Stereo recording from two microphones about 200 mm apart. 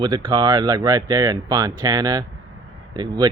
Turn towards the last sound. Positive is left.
turn(degrees=-20)  # may be behind; listen again after turning